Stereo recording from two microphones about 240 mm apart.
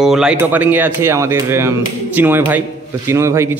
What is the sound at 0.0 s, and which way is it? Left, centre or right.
Speech, centre.